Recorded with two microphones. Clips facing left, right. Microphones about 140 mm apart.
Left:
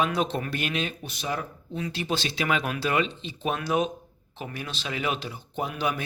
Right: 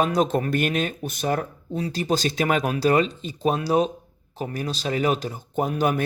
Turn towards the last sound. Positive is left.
turn(degrees=-45)  # may be behind; listen again after turning